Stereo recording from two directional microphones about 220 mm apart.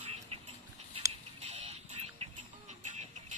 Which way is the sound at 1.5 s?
30° right (ahead or behind).